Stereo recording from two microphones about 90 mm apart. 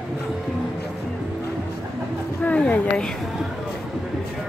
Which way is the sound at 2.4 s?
15° left (ahead or behind).